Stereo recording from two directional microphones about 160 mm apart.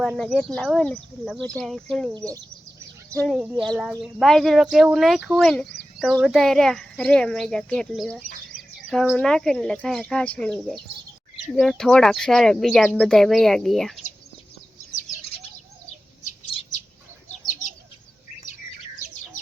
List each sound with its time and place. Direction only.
0.0 s a child's voice: centre (ahead or behind)
3.2 s a child's voice: 5° right (ahead or behind)
16.2 s bird: 40° left (ahead or behind)